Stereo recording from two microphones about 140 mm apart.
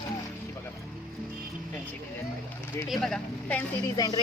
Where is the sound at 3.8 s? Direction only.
30° left (ahead or behind).